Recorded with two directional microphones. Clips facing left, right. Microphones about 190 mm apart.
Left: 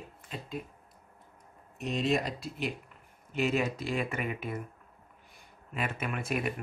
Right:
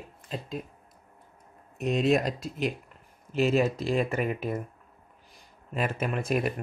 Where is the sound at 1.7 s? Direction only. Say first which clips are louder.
Right 5 dB; 55° right (ahead or behind); by 4.6 s 40° right (ahead or behind).